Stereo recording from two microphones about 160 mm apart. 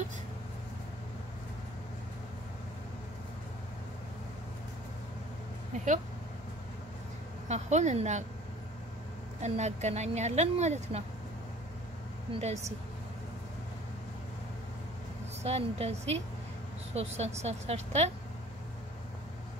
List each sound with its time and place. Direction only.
7.4 s speech: 45° right (ahead or behind)
9.4 s speech: 45° right (ahead or behind)
12.4 s speech: 45° right (ahead or behind)
15.4 s speech: 40° right (ahead or behind)